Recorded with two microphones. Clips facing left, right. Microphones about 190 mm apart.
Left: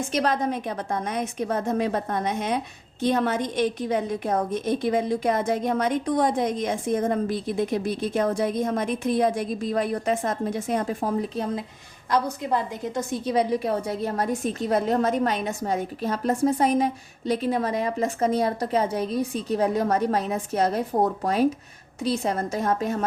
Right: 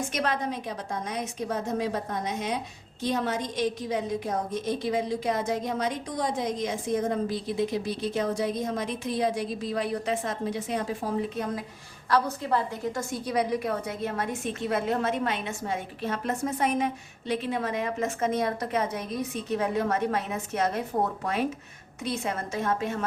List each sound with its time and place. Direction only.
0.1 s a woman's voice: 35° left (ahead or behind)
0.5 s a woman's voice: 55° left (ahead or behind)
12.1 s a woman's voice: 15° left (ahead or behind); by 23.0 s 40° left (ahead or behind)